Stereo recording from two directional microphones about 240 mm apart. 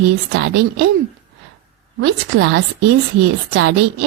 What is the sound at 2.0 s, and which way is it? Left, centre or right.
Speech, right.